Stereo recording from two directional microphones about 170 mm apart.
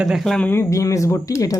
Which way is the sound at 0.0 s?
Centre (ahead or behind).